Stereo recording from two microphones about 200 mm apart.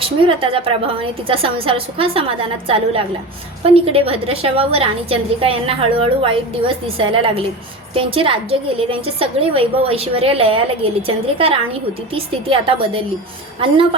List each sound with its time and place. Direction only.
0.0 s a woman's voice: 25° right (ahead or behind)